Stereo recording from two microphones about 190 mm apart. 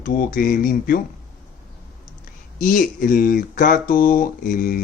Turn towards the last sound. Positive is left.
turn(degrees=45)  # may be behind; listen again after turning